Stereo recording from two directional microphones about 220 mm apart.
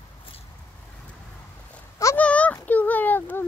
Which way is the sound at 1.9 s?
10° left (ahead or behind).